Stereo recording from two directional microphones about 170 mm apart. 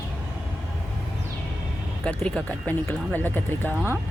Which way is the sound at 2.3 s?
5° left (ahead or behind).